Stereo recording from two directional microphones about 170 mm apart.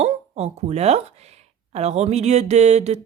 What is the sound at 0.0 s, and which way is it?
A woman's voice, 40° right (ahead or behind).